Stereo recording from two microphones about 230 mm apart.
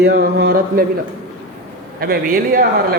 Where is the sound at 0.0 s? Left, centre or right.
Right.